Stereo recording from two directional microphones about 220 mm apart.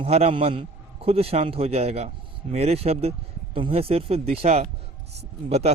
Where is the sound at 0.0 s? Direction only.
25° right (ahead or behind).